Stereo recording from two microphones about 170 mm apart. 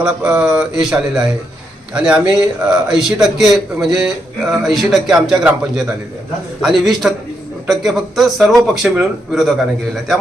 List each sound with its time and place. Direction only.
0.0 s a man's voice: 5° right (ahead or behind)